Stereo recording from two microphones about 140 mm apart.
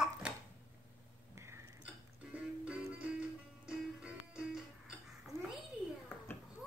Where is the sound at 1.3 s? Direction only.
20° right (ahead or behind).